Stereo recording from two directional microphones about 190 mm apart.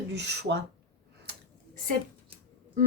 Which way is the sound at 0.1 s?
65° right (ahead or behind).